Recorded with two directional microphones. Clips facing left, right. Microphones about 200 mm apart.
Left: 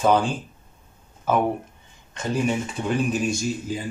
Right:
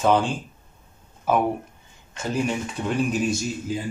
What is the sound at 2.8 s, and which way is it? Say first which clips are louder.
Speech: even; centre (ahead or behind).